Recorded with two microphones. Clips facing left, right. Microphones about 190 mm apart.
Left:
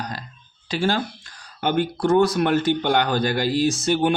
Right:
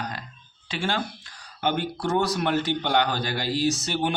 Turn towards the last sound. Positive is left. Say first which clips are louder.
# left 5 dB
turn(degrees=50)  # may be behind; listen again after turning